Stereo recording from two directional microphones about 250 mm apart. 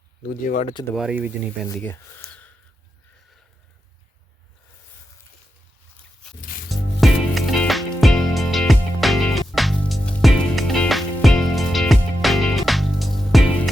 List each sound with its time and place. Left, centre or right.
0.3 s speech: left
0.9 s speech: centre
1.6 s speech: centre
6.2 s music: centre